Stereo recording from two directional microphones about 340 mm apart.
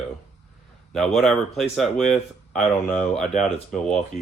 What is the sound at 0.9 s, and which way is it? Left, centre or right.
Speech, centre.